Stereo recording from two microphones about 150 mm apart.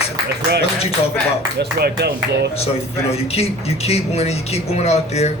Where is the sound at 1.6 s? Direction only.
90° right.